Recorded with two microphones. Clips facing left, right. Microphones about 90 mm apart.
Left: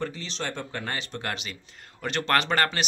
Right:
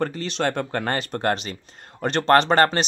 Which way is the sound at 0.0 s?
55° right (ahead or behind).